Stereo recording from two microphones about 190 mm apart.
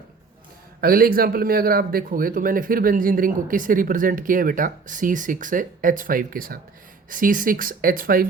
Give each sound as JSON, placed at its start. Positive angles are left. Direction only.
{"t": 0.8, "sound": "speech", "side_deg": -50}